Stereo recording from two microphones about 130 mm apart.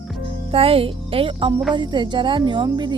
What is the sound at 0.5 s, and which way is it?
Speech, 50° right (ahead or behind).